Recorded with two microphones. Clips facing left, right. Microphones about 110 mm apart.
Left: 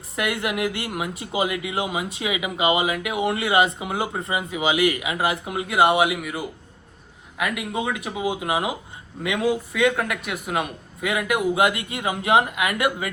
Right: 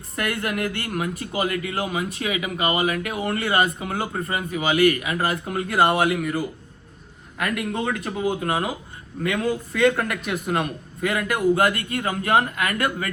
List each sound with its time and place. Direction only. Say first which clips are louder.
0.2 s speech: left 1 dB; 15° left (ahead or behind)